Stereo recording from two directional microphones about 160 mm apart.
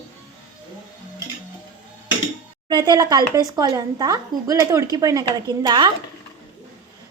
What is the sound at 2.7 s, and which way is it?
Speech, 25° right (ahead or behind).